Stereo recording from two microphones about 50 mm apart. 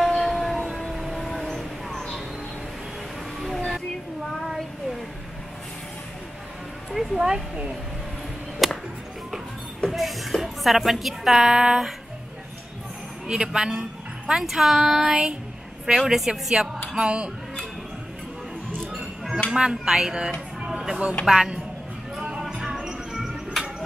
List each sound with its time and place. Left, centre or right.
0.0 s music: centre
0.7 s train: centre
1.0 s vehicle: centre
3.3 s vehicle: centre
6.9 s a woman's voice: centre
8.6 s music: centre
9.8 s a sound: centre
13.3 s a woman's voice: centre
19.5 s a woman's voice: centre
20.6 s vehicle: centre
21.3 s a woman's voice: centre
22.5 s music: centre